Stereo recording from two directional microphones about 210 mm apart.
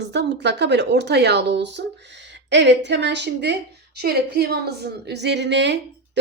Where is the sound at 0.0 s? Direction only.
55° right (ahead or behind).